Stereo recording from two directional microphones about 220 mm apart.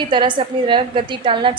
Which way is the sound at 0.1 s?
20° right (ahead or behind).